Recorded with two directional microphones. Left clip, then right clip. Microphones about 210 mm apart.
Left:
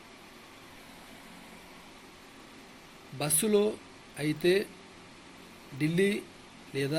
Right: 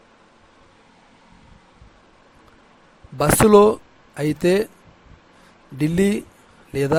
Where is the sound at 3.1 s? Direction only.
45° right (ahead or behind).